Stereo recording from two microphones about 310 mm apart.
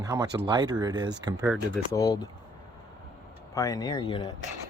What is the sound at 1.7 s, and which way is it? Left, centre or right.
Speech, centre.